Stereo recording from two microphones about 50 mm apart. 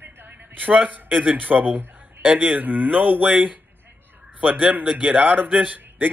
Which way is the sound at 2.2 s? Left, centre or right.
Right.